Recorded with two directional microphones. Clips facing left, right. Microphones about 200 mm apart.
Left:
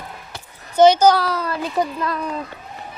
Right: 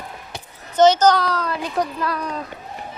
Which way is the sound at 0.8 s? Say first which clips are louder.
Left 2 dB; 10° left (ahead or behind).